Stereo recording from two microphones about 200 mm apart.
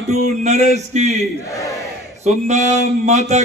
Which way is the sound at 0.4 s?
35° right (ahead or behind).